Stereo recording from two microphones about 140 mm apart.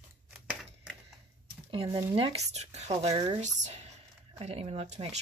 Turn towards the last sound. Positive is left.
turn(degrees=-50)  # may be behind; listen again after turning